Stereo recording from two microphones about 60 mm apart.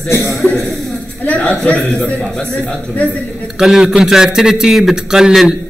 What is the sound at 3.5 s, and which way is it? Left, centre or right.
A man's voice, centre.